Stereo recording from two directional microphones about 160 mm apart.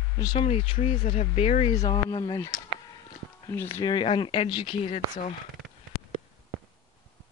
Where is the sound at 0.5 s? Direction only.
40° left (ahead or behind).